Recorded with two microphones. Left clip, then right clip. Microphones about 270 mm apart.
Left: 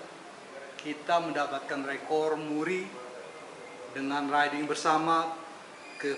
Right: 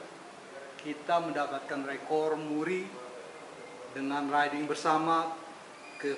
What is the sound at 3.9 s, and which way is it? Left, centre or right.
Speech, centre.